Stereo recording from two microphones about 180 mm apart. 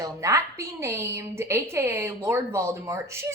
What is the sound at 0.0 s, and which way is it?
A woman's voice, 15° right (ahead or behind).